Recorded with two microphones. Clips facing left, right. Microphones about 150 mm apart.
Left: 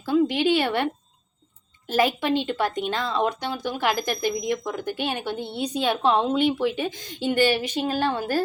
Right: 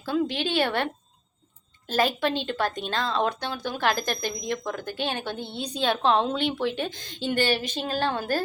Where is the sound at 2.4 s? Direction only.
10° left (ahead or behind).